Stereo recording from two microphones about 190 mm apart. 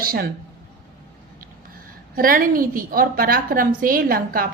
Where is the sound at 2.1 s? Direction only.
50° right (ahead or behind).